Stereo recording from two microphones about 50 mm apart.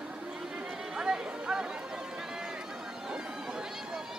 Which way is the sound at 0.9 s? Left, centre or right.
Centre.